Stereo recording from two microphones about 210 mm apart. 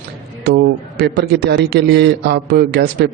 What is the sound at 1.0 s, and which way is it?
A man's voice, 50° right (ahead or behind).